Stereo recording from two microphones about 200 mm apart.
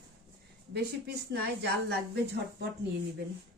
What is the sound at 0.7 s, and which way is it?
Speech, 55° right (ahead or behind).